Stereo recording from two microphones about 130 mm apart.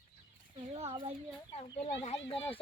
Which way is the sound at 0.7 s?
50° right (ahead or behind).